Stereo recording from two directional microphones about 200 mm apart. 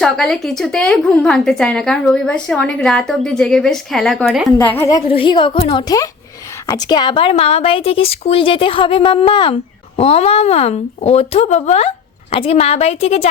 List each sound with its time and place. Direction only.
0.0 s a woman's voice: centre (ahead or behind)
4.5 s a woman's voice: 10° left (ahead or behind); by 13.2 s 30° left (ahead or behind)